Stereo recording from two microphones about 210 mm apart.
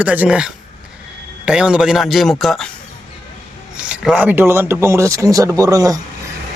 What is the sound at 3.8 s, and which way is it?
Speech, 5° right (ahead or behind).